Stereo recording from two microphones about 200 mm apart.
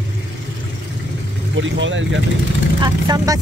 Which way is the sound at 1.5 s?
70° right (ahead or behind).